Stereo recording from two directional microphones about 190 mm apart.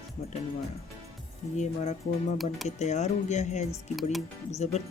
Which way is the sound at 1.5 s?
35° left (ahead or behind).